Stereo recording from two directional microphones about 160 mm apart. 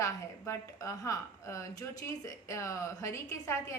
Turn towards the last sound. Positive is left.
turn(degrees=20)  # may be behind; listen again after turning